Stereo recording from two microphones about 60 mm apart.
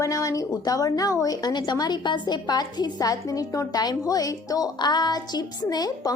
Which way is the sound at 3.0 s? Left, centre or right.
Left.